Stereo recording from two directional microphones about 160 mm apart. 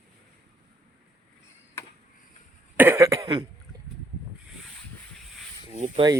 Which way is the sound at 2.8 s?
15° right (ahead or behind).